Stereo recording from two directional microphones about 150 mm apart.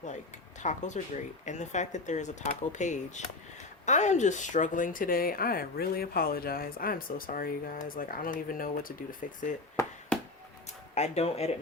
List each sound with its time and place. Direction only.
0.6 s speech: 55° left (ahead or behind)
9.8 s chop: 20° left (ahead or behind)
10.9 s speech: 45° left (ahead or behind)